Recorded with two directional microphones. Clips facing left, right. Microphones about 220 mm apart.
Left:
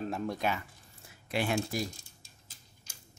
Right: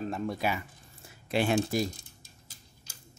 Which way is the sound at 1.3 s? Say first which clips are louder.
Right 5 dB; 25° right (ahead or behind).